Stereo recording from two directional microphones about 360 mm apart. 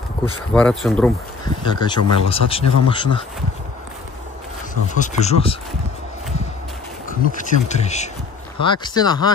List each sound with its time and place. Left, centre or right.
0.5 s speech: centre
4.9 s speech: centre
7.1 s speech: centre